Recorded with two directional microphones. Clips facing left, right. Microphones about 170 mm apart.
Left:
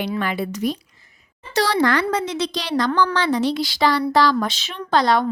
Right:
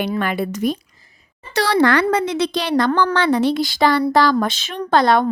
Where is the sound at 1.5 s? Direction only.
60° right (ahead or behind).